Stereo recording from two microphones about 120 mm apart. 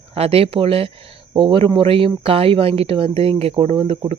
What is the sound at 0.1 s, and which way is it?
Speech, 55° right (ahead or behind).